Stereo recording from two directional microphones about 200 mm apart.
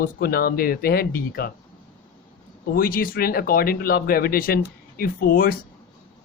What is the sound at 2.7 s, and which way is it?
Speech, 45° left (ahead or behind).